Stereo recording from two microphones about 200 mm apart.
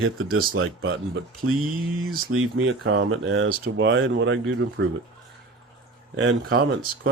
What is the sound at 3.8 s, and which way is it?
Speech, 65° right (ahead or behind).